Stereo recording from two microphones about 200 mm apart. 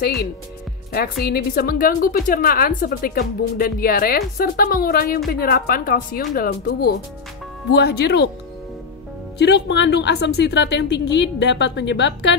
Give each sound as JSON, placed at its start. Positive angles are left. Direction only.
{"t": 0.0, "sound": "a woman's voice", "side_deg": 50}
{"t": 9.4, "sound": "a woman's voice", "side_deg": 60}